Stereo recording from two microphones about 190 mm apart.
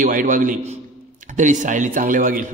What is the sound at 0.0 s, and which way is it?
A man's voice, 45° right (ahead or behind).